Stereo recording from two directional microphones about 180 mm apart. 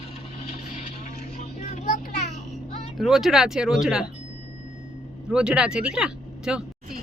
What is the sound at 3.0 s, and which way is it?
Speech, centre (ahead or behind).